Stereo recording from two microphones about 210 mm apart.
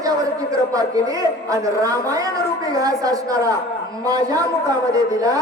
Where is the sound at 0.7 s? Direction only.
15° right (ahead or behind).